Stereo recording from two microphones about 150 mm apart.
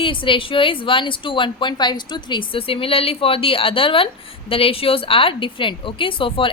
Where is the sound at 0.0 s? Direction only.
35° left (ahead or behind).